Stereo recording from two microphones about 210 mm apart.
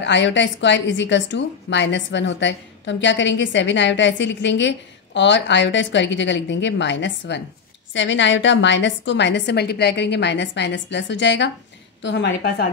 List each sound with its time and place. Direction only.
0.0 s a woman's voice: 60° left (ahead or behind)